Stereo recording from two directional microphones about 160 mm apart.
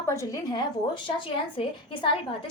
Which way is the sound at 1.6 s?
35° left (ahead or behind).